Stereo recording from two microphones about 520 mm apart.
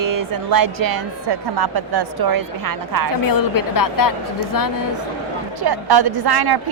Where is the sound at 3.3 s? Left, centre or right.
Left.